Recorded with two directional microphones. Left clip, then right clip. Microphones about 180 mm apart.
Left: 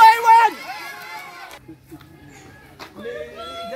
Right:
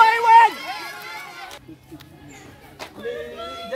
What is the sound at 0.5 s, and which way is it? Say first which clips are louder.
Run: right 1 dB; 35° right (ahead or behind).